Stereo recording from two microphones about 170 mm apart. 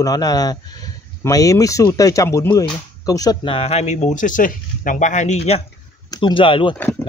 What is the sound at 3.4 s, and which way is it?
Speech, 35° left (ahead or behind).